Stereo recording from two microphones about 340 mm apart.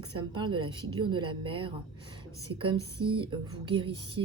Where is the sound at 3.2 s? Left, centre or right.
Centre.